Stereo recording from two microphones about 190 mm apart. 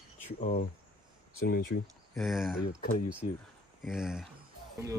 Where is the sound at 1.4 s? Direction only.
50° left (ahead or behind).